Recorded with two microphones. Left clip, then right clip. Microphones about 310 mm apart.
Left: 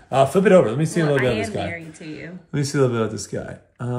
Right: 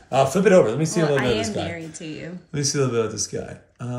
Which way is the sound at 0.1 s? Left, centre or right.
Left.